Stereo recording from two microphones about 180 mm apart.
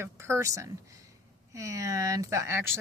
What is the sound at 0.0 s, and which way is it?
Speech, 15° right (ahead or behind).